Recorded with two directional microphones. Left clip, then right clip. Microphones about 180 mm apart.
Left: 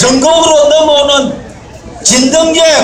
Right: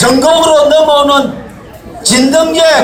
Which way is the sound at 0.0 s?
5° left (ahead or behind).